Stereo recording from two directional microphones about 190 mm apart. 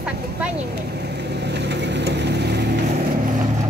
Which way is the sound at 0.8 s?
60° right (ahead or behind).